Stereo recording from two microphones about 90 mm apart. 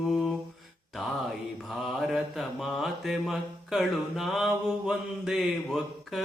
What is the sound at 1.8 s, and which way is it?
Mantra, centre (ahead or behind).